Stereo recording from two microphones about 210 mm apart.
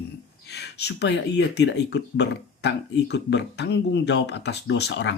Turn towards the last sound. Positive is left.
turn(degrees=55)  # may be behind; listen again after turning